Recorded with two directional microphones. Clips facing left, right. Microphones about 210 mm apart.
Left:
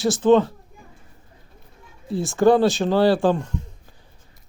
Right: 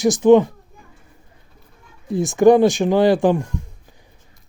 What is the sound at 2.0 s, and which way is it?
Speech, 15° right (ahead or behind).